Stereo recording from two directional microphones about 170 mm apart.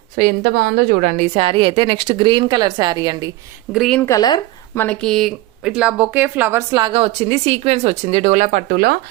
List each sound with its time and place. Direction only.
0.2 s speech: 65° right (ahead or behind); by 3.2 s 20° right (ahead or behind)
3.7 s speech: centre (ahead or behind)
4.0 s speech: 20° left (ahead or behind)
4.8 s speech: 5° left (ahead or behind); by 9.0 s 60° right (ahead or behind)